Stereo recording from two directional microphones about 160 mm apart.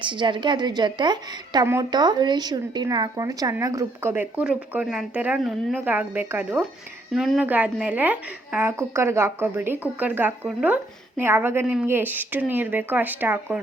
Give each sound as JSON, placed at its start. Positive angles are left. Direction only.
{"t": 0.0, "sound": "a woman's voice", "side_deg": -30}
{"t": 5.7, "sound": "speech", "side_deg": -10}